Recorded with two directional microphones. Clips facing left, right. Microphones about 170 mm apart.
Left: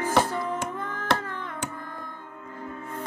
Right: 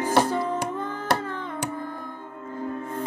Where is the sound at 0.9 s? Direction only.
10° right (ahead or behind).